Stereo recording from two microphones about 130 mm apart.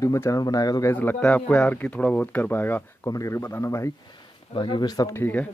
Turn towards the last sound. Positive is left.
turn(degrees=15)  # may be behind; listen again after turning